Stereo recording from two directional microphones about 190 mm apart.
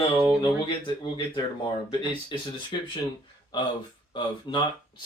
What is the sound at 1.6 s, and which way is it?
Speech, 25° left (ahead or behind).